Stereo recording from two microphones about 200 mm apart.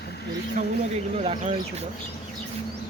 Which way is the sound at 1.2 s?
30° right (ahead or behind).